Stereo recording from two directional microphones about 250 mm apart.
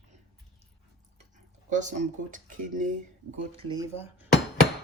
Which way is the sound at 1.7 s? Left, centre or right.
Right.